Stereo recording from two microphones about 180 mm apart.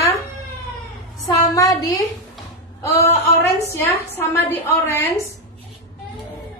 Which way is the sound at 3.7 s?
10° left (ahead or behind).